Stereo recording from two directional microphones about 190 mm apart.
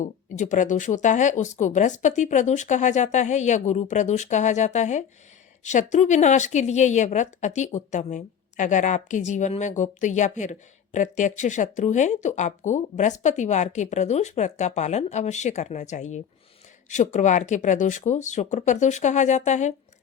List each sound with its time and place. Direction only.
0.0 s a woman's voice: 40° left (ahead or behind)